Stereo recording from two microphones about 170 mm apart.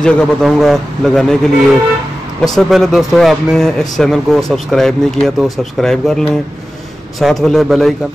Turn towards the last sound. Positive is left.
turn(degrees=0)  # may be behind; listen again after turning